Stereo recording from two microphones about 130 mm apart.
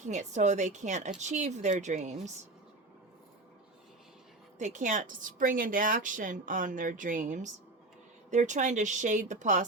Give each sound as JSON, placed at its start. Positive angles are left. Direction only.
{"t": 0.0, "sound": "a woman's voice", "side_deg": -65}
{"t": 4.5, "sound": "a woman's voice", "side_deg": -70}